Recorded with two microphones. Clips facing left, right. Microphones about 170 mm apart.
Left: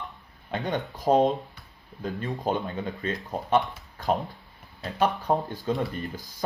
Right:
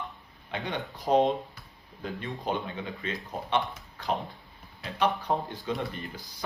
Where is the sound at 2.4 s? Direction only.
45° left (ahead or behind).